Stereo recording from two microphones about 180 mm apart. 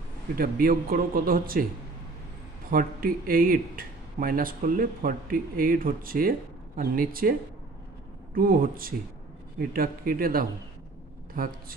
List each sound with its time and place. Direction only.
0.4 s speech: 55° right (ahead or behind)
2.7 s speech: 55° right (ahead or behind)
8.4 s speech: 55° right (ahead or behind)